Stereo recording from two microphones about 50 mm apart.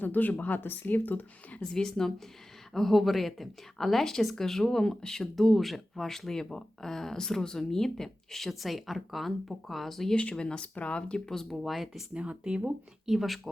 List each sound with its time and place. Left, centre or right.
0.0 s speech: left
1.7 s speech: centre
10.2 s speech: left
11.5 s speech: centre
12.1 s speech: right
13.1 s speech: centre